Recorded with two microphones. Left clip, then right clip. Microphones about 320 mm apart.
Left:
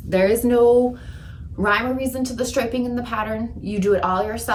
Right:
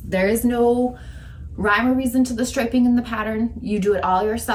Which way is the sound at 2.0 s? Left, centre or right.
Centre.